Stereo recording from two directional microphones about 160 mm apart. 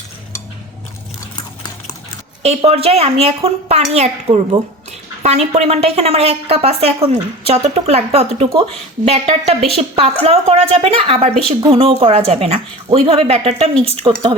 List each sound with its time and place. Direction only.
2.4 s a woman's voice: 40° right (ahead or behind)